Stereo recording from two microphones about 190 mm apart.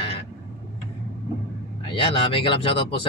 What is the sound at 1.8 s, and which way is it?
Speech, 30° left (ahead or behind).